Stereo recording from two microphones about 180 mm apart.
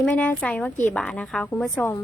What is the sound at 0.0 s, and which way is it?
A woman's voice, 5° left (ahead or behind).